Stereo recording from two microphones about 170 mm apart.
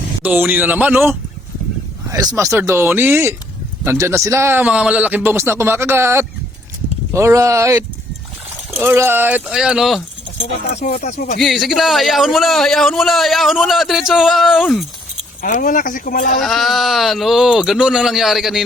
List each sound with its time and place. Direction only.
0.2 s a man's voice: 10° right (ahead or behind)
2.3 s a man's voice: 15° right (ahead or behind)
8.8 s a man's voice: 15° right (ahead or behind)
10.9 s speech: 45° left (ahead or behind)
11.3 s a man's voice: centre (ahead or behind)
15.4 s speech: 50° left (ahead or behind)
16.4 s a man's voice: centre (ahead or behind)